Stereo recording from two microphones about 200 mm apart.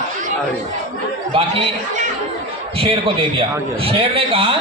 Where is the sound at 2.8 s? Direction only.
30° right (ahead or behind).